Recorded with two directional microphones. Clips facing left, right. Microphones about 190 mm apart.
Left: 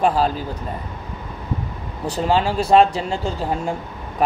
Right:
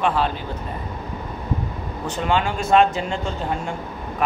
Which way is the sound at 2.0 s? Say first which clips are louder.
Left 3 dB; 35° left (ahead or behind).